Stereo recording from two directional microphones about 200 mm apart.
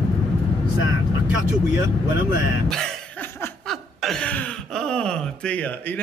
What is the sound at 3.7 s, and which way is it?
Speech, centre (ahead or behind).